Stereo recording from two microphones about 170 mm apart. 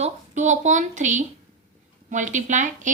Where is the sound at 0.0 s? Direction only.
45° right (ahead or behind).